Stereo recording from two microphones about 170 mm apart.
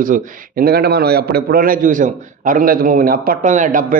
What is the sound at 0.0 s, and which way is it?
A man's voice, 55° right (ahead or behind).